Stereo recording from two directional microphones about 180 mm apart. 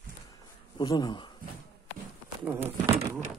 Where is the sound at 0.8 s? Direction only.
25° left (ahead or behind).